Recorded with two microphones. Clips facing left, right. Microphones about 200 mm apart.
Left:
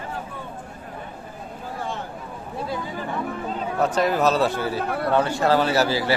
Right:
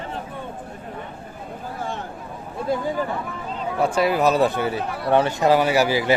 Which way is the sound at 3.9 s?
10° right (ahead or behind).